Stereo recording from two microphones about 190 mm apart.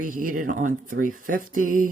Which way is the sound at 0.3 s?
45° right (ahead or behind).